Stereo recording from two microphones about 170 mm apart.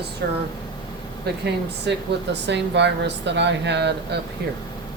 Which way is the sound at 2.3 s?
90° right.